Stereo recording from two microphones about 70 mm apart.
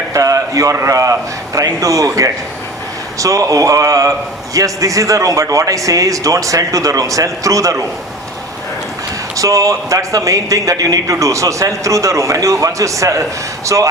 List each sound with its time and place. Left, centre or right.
0.1 s a sound: right
0.9 s a man's voice: right
9.3 s a man's voice: right